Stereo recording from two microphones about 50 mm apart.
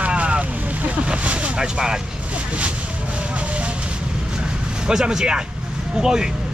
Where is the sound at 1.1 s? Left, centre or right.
Right.